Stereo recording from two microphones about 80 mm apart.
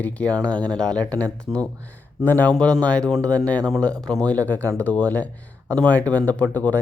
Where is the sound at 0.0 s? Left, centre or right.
Centre.